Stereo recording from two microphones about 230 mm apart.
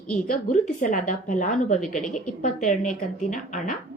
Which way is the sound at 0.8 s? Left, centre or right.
Left.